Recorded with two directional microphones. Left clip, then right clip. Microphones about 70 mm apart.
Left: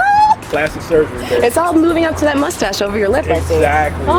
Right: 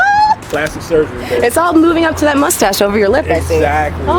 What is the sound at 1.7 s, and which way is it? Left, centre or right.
Speech, right.